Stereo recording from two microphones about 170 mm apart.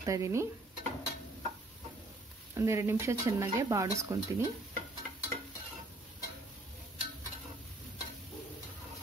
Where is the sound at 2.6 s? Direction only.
15° right (ahead or behind).